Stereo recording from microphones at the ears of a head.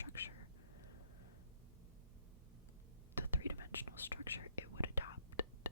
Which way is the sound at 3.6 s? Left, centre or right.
Left.